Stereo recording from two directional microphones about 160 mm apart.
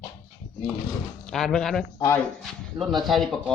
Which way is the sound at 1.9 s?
20° left (ahead or behind).